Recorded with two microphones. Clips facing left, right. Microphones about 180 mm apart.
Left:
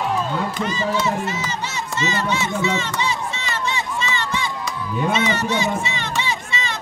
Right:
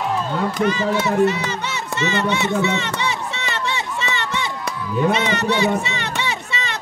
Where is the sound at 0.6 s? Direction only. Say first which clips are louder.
Right 5 dB; 60° right (ahead or behind).